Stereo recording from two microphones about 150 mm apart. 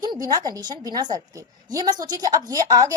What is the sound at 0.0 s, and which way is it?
A woman's voice, 25° right (ahead or behind).